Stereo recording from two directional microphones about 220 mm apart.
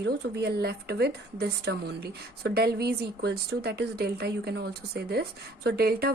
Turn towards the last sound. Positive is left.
turn(degrees=-45)  # may be behind; listen again after turning